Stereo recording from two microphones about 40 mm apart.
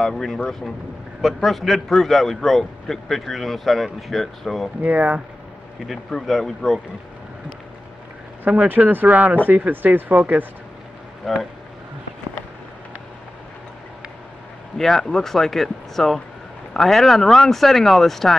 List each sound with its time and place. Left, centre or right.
0.0 s a man's voice: centre
6.2 s speech: centre
8.5 s speech: right
8.9 s speech: right
11.3 s a man's voice: centre
14.8 s speech: centre